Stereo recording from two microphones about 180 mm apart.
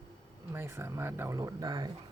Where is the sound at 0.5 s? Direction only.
15° right (ahead or behind).